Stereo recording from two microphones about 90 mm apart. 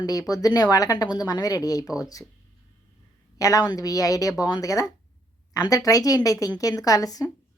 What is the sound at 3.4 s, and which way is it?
Speech, 40° left (ahead or behind).